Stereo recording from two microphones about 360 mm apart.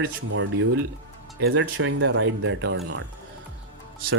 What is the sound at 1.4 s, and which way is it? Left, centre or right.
Speech, right.